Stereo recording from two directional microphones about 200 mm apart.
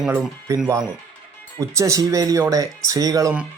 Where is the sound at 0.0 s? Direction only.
10° right (ahead or behind).